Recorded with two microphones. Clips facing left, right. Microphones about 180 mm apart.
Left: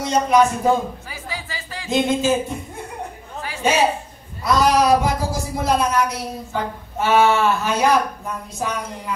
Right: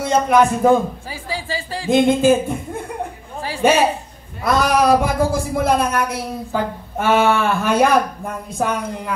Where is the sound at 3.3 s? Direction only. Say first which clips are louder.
Right 4 dB; 30° right (ahead or behind).